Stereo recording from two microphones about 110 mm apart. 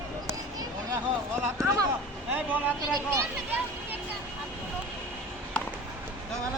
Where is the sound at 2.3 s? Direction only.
15° right (ahead or behind).